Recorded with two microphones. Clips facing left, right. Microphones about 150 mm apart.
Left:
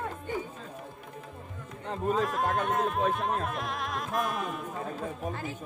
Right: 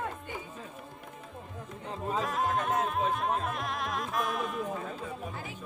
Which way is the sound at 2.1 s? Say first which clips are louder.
Right 1 dB; centre (ahead or behind).